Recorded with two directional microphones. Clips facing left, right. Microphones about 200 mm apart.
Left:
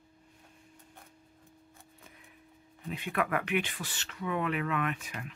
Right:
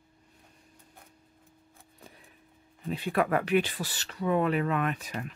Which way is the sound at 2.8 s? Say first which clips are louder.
Right 5 dB; 35° right (ahead or behind).